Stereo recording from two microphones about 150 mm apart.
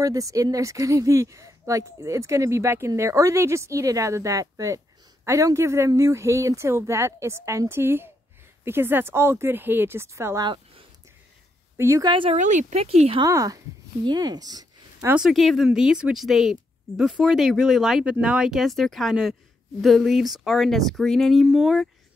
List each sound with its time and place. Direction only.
0.0 s speech: 20° right (ahead or behind)
11.7 s a woman's voice: 20° right (ahead or behind)
12.1 s speech: 35° right (ahead or behind)
12.4 s speech: 55° right (ahead or behind)
13.2 s speech: 20° right (ahead or behind)
15.0 s speech: 5° right (ahead or behind)